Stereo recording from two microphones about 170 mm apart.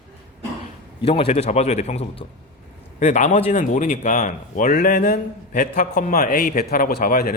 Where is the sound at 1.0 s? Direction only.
35° left (ahead or behind).